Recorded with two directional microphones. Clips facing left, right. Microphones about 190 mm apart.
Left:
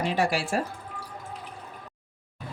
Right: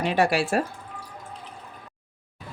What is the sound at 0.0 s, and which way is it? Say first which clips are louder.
Speech: right 4 dB; 65° right (ahead or behind).